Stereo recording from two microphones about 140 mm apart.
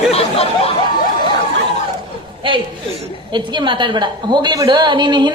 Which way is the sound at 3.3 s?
35° right (ahead or behind).